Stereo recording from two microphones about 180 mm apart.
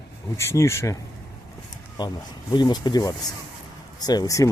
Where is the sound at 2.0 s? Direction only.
25° left (ahead or behind).